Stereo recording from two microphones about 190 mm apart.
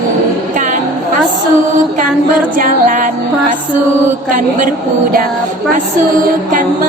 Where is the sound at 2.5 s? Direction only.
45° right (ahead or behind).